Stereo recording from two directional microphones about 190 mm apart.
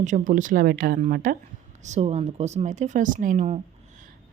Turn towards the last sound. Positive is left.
turn(degrees=-40)  # may be behind; listen again after turning